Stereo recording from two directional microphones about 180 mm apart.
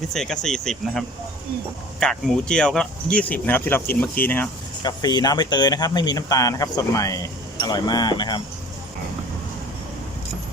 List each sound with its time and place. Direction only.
0.1 s speech: centre (ahead or behind)
4.8 s speech: 25° left (ahead or behind)